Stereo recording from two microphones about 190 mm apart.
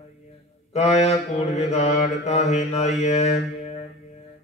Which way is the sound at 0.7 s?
35° left (ahead or behind).